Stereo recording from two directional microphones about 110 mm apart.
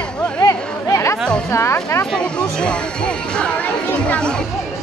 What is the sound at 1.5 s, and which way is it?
Speech, 25° left (ahead or behind).